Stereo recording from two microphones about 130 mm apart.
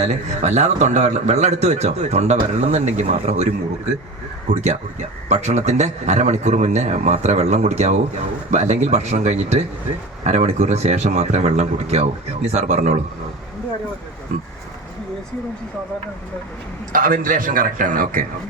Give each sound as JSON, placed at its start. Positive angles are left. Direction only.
{"t": 0.0, "sound": "a man's voice", "side_deg": -60}
{"t": 16.9, "sound": "a man's voice", "side_deg": -90}